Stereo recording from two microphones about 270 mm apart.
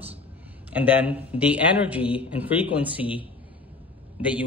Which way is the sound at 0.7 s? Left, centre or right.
Centre.